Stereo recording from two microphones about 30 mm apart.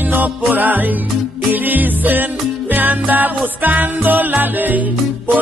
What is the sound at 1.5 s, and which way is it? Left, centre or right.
Music, right.